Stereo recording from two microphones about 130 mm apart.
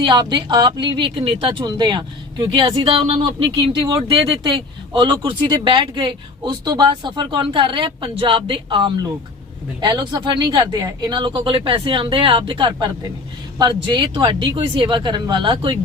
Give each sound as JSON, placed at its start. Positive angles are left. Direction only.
{"t": 0.0, "sound": "speech", "side_deg": -35}